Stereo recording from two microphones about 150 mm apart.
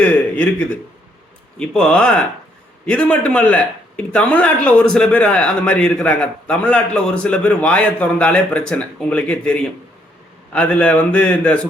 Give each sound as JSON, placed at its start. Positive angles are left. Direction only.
{"t": 0.0, "sound": "speech", "side_deg": 10}